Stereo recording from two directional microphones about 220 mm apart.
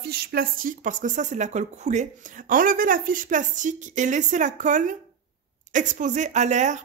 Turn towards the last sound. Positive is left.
turn(degrees=-35)  # may be behind; listen again after turning